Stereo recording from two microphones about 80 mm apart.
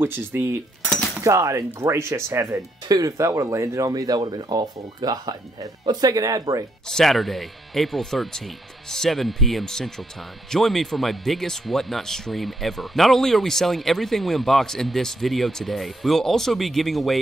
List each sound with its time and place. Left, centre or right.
0.0 s cutlery: right
1.2 s speech: right
4.2 s speech: right
6.9 s speech: centre